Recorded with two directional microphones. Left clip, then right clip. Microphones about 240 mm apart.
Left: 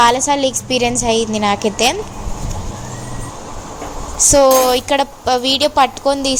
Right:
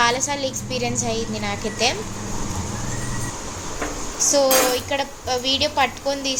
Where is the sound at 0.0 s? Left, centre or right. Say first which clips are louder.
Left 8 dB; left.